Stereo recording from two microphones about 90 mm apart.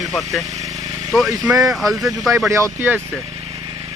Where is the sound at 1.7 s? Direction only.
Centre (ahead or behind).